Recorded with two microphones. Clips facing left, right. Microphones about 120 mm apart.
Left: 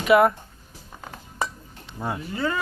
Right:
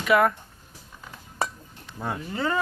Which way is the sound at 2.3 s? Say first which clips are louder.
Right 1 dB; 20° right (ahead or behind).